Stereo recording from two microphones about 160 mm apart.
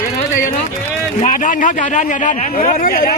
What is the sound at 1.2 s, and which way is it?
A man's voice, 55° left (ahead or behind).